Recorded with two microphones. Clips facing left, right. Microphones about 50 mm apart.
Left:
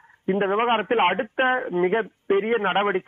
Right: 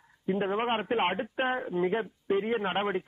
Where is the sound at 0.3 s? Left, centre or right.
Left.